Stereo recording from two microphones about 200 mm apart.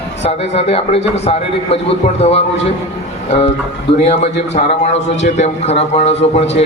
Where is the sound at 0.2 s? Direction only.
30° left (ahead or behind).